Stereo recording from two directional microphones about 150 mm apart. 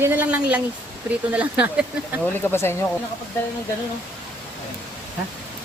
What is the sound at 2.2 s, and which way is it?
Speech, 15° left (ahead or behind).